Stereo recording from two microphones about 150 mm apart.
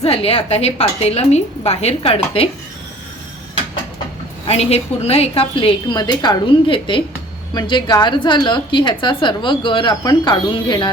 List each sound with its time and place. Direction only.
0.0 s a woman's voice: 40° left (ahead or behind)
4.4 s a woman's voice: 40° left (ahead or behind)